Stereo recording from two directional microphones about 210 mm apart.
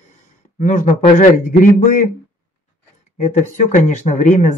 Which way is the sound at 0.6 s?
35° left (ahead or behind).